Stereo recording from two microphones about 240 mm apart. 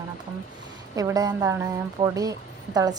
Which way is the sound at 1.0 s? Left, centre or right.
Centre.